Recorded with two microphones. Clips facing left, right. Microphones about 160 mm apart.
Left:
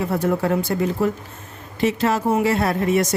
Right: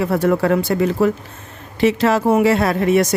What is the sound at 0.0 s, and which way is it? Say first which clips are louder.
Speech: right 4 dB; 75° right (ahead or behind).